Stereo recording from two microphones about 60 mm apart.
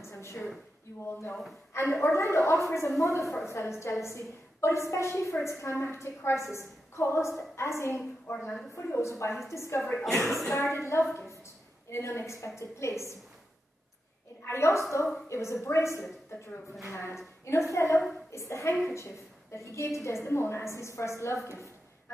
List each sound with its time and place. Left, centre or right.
0.1 s a sound: left
0.9 s speech: left
1.7 s a woman's voice: left
9.5 s a woman's voice: left
10.0 s speech: centre
10.5 s a woman's voice: left
14.5 s a woman's voice: left